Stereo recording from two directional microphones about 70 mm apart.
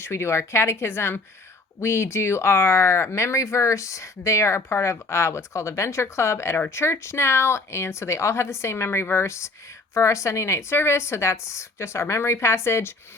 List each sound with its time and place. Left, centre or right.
0.0 s a woman's voice: left